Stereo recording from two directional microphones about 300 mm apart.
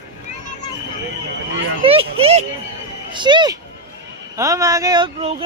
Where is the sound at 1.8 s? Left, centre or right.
Centre.